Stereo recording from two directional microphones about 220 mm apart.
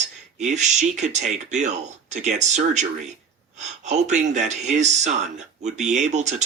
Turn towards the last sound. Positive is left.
turn(degrees=-30)  # may be behind; listen again after turning